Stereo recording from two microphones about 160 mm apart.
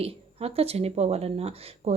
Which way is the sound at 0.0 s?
40° right (ahead or behind).